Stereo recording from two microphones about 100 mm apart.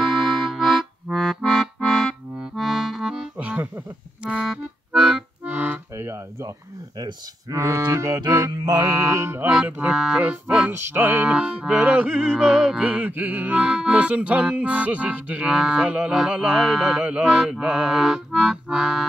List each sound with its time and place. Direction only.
0.0 s music: centre (ahead or behind)
4.9 s accordion: centre (ahead or behind)
5.4 s accordion: 15° right (ahead or behind)
6.0 s a sound: 25° right (ahead or behind)
7.0 s a sound: 45° right (ahead or behind)
7.5 s mantra: 30° right (ahead or behind)
9.7 s music: 10° right (ahead or behind)
12.4 s music: 5° right (ahead or behind)
12.8 s music: 15° right (ahead or behind)
18.3 s accordion: centre (ahead or behind)